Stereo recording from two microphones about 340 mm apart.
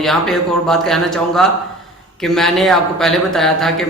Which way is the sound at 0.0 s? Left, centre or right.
Centre.